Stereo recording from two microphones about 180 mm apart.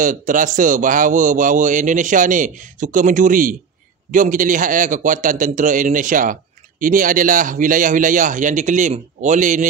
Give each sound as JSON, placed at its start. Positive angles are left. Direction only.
{"t": 0.0, "sound": "a man's voice", "side_deg": -45}